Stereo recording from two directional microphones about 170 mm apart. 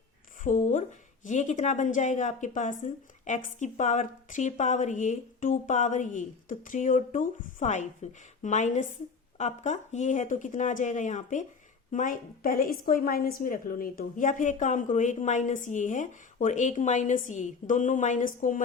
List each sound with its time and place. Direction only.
0.4 s a woman's voice: 50° left (ahead or behind)